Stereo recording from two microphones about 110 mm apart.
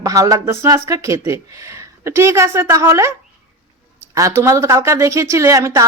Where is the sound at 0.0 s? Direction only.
30° right (ahead or behind).